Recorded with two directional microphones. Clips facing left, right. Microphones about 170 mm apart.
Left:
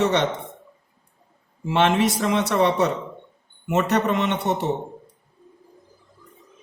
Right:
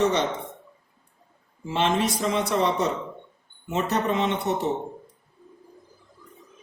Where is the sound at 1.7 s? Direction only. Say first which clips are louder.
Left 4 dB; 70° left (ahead or behind).